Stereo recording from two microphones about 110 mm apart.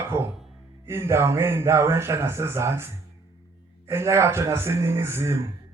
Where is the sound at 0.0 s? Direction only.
25° right (ahead or behind).